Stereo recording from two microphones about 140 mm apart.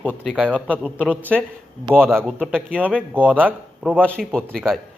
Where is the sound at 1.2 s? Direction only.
15° right (ahead or behind).